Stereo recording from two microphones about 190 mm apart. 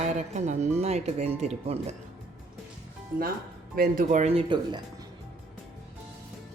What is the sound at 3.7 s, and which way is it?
Speech, 50° right (ahead or behind).